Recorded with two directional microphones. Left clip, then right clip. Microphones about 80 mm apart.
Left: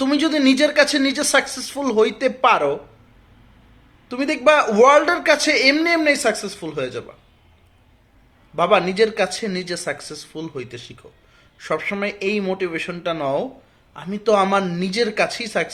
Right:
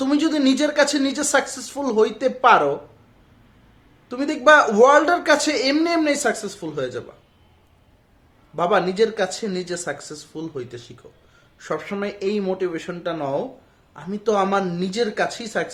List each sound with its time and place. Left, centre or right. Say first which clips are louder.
0.0 s speech: left 2 dB; right
4.1 s speech: right 1 dB; right
5.7 s speech: left 2 dB; right
8.5 s speech: left 2 dB; right